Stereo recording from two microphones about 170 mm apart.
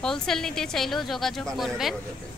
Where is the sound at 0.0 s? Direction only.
5° left (ahead or behind).